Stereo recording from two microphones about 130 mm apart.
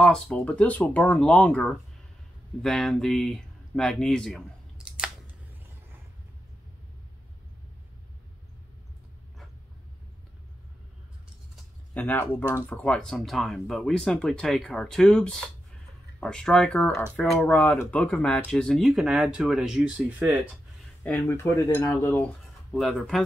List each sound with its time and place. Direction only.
0.0 s speech: 5° left (ahead or behind)
4.7 s a sound: 5° right (ahead or behind)
11.9 s speech: 15° left (ahead or behind); by 20.3 s 10° right (ahead or behind)
21.0 s speech: 15° left (ahead or behind)
22.7 s speech: centre (ahead or behind)